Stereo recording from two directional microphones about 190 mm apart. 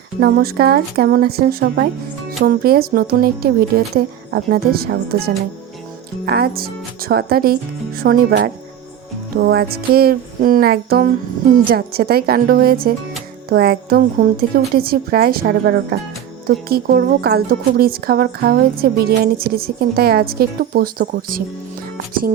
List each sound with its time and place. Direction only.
0.2 s a woman's voice: 60° right (ahead or behind)